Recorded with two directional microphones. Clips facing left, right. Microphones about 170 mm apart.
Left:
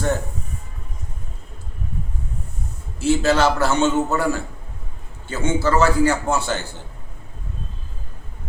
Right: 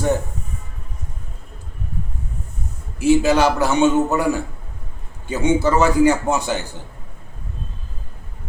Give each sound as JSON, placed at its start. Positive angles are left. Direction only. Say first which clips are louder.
{"t": 3.0, "sound": "a man's voice", "louder": "right 3 dB", "side_deg": -15}